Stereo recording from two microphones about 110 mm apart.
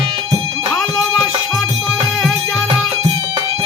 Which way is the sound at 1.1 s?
Centre (ahead or behind).